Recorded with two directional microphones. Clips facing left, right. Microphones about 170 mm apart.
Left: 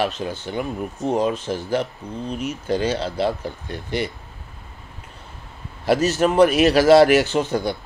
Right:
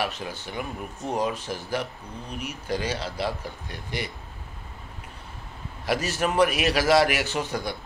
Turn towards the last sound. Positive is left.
turn(degrees=25)  # may be behind; listen again after turning